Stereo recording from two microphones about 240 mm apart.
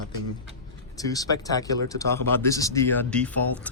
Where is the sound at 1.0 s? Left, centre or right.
Centre.